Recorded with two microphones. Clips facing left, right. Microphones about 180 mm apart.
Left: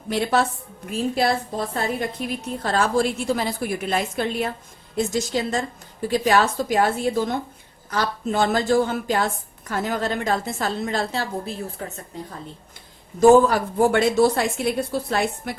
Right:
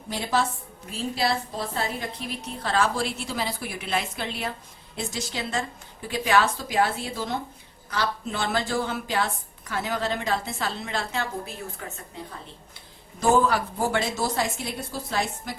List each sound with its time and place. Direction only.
0.1 s a woman's voice: 60° left (ahead or behind); by 12.0 s 35° left (ahead or behind)
13.1 s a woman's voice: 50° left (ahead or behind)